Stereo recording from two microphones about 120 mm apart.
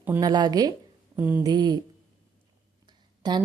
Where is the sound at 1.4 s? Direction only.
35° right (ahead or behind).